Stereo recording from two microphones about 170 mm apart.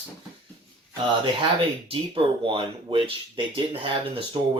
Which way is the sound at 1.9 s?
30° right (ahead or behind).